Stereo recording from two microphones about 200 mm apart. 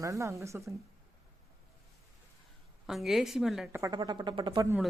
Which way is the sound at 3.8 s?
20° right (ahead or behind).